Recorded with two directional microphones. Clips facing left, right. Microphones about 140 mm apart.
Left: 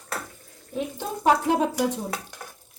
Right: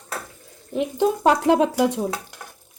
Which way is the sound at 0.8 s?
90° right.